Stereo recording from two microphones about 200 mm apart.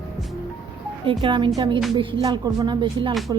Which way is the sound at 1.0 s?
25° right (ahead or behind).